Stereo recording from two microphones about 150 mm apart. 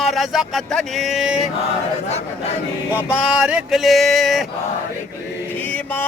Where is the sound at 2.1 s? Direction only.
45° left (ahead or behind).